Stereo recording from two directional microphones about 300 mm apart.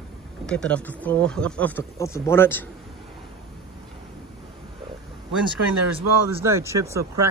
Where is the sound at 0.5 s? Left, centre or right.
Centre.